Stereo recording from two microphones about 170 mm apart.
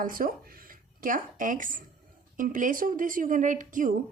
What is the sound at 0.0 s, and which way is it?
A woman's voice, 55° right (ahead or behind).